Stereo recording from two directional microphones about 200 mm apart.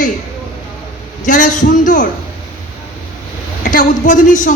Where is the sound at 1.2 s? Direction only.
40° left (ahead or behind).